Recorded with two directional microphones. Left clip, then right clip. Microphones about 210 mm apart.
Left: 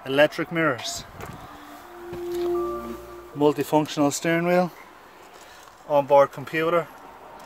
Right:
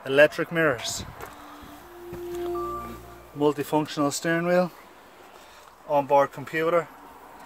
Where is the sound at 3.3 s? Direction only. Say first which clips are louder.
Left 3 dB; 20° left (ahead or behind).